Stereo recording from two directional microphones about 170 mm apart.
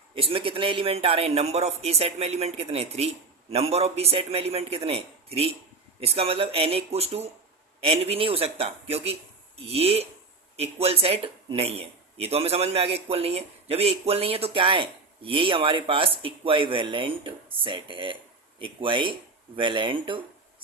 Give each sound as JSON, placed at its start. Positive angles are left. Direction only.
{"t": 0.1, "sound": "speech", "side_deg": -35}